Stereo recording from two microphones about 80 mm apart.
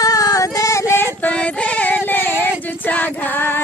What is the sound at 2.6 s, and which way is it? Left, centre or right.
Female singing, left.